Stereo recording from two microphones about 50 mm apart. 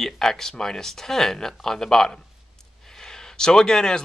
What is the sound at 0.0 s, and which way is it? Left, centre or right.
Speech, centre.